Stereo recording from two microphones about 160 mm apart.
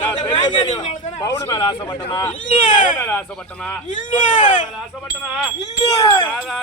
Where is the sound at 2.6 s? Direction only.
55° left (ahead or behind).